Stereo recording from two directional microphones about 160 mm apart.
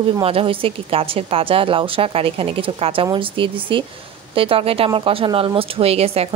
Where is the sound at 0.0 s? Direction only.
35° right (ahead or behind).